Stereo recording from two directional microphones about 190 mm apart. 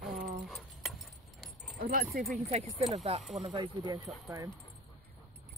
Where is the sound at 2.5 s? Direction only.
35° right (ahead or behind).